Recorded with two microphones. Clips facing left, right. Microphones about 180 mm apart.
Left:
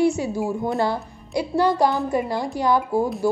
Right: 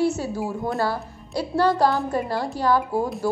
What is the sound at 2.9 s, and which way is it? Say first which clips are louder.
Speech: left 3 dB; centre (ahead or behind).